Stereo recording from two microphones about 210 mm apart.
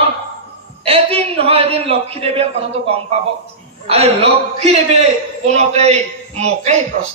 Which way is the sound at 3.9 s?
30° right (ahead or behind).